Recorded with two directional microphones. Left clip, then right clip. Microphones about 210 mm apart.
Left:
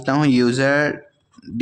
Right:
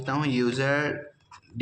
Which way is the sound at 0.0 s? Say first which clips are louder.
Left 9 dB; 50° left (ahead or behind).